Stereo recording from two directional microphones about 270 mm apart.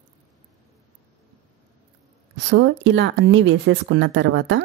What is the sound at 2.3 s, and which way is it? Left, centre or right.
Speech, right.